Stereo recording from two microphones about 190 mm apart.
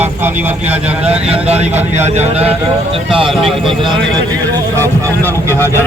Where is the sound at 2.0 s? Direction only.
35° right (ahead or behind).